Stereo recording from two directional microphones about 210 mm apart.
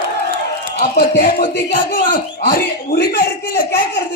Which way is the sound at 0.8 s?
45° left (ahead or behind).